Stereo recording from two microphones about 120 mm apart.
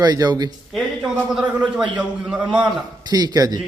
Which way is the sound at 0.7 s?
5° right (ahead or behind).